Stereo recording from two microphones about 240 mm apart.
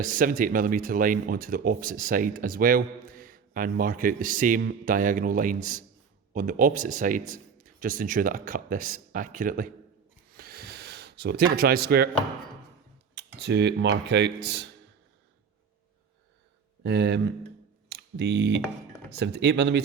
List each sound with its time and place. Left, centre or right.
0.0 s speech: right
10.3 s a sound: right
11.5 s speech: right
13.1 s speech: right
16.8 s speech: right
17.8 s a sound: right
19.1 s speech: right